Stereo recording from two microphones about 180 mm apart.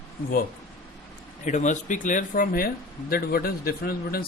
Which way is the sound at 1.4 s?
45° left (ahead or behind).